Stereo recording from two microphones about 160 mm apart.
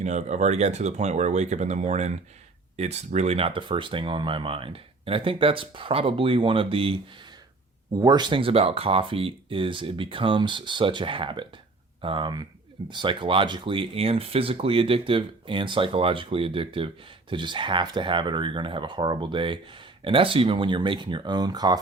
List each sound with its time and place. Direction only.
0.0 s speech: 45° right (ahead or behind)
7.9 s speech: 25° right (ahead or behind)